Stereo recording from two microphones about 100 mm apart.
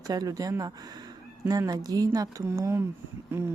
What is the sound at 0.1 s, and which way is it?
Speech, 40° right (ahead or behind).